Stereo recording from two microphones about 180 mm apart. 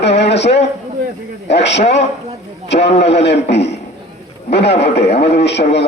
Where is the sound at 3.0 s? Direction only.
70° left (ahead or behind).